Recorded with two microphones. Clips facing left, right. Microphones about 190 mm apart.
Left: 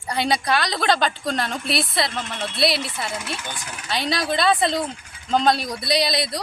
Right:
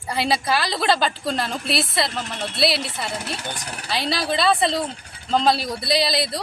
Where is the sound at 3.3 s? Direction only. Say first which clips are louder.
Right 2 dB; 40° right (ahead or behind).